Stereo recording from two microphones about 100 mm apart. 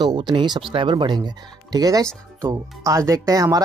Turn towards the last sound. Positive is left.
turn(degrees=-35)  # may be behind; listen again after turning